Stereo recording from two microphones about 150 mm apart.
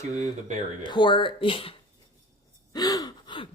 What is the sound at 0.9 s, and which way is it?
Speech, 30° left (ahead or behind).